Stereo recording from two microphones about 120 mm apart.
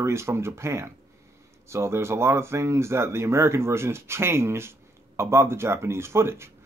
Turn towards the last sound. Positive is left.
turn(degrees=-20)  # may be behind; listen again after turning